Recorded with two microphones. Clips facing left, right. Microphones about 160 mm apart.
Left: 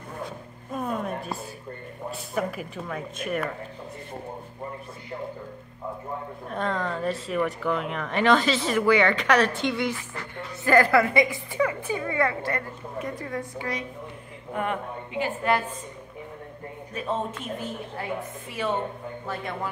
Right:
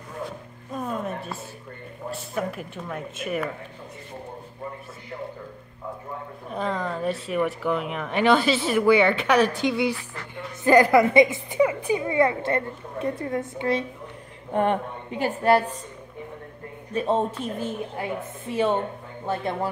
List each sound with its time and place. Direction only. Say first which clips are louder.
0.7 s a sound: even; 5° left (ahead or behind)
2.0 s speech: even; centre (ahead or behind)
6.5 s speech: right 1 dB; centre (ahead or behind)
10.6 s a woman's voice: right 3 dB; 20° right (ahead or behind); by 15.7 s 35° right (ahead or behind)
16.9 s a woman's voice: right 6 dB; 30° right (ahead or behind)